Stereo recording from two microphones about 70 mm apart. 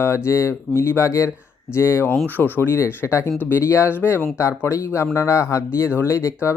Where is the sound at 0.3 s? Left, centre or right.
Left.